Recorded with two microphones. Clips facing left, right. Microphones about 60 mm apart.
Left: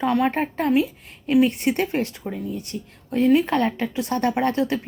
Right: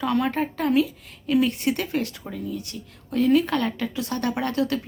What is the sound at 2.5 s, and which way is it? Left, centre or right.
A woman's voice, left.